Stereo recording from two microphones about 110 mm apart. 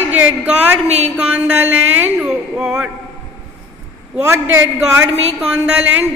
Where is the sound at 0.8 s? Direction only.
80° right.